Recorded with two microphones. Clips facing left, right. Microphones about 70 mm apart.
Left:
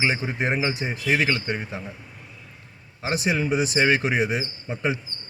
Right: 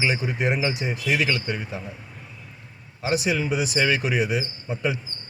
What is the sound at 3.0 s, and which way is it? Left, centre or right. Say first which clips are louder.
Speech: even; left.